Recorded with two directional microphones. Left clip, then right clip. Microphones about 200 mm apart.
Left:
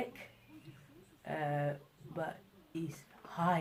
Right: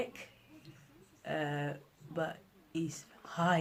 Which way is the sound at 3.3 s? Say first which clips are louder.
Right 2 dB; 35° right (ahead or behind).